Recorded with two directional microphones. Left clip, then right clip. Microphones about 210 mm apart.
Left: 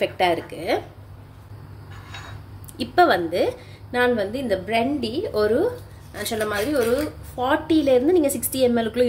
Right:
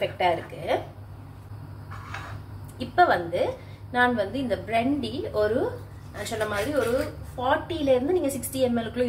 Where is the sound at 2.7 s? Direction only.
45° left (ahead or behind).